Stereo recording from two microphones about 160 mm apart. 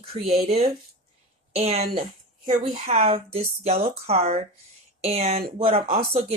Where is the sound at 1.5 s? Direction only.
40° right (ahead or behind).